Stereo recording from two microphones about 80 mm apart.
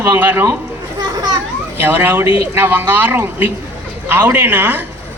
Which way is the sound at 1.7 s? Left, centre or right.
Right.